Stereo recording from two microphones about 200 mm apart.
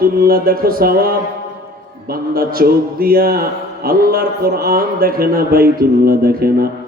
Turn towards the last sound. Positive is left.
turn(degrees=-50)  # may be behind; listen again after turning